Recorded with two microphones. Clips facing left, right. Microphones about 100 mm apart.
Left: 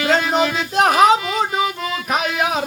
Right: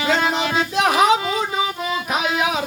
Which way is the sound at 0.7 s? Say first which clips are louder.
Left 4 dB; 50° left (ahead or behind).